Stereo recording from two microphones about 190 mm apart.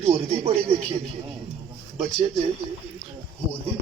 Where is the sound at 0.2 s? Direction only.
30° right (ahead or behind).